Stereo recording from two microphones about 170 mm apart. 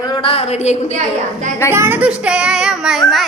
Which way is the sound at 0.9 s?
45° right (ahead or behind).